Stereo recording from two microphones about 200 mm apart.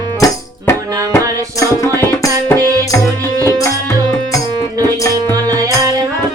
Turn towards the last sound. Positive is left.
turn(degrees=-15)  # may be behind; listen again after turning